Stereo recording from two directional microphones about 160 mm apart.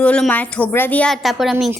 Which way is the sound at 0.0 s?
10° left (ahead or behind).